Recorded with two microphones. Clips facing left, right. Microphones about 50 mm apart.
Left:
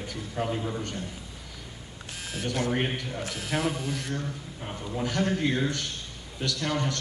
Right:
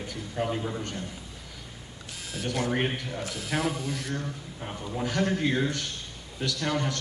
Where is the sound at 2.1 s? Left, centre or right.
Left.